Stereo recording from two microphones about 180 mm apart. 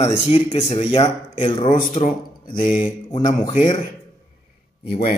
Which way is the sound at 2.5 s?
45° left (ahead or behind).